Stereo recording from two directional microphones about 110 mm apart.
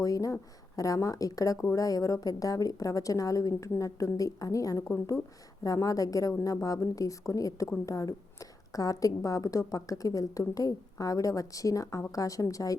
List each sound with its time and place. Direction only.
0.0 s a woman's voice: 30° left (ahead or behind)